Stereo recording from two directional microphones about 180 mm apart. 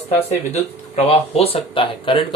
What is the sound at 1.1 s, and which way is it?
Speech, 35° left (ahead or behind).